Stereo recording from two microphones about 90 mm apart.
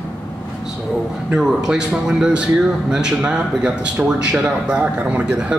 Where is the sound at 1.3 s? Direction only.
5° right (ahead or behind).